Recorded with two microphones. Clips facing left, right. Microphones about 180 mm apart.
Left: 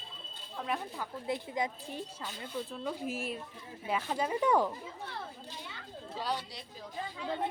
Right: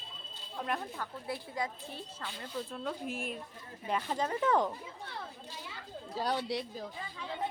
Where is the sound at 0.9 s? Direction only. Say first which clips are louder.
Left 3 dB; 20° left (ahead or behind).